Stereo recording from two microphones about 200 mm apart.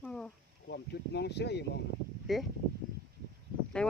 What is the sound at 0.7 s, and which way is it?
Speech, 55° left (ahead or behind).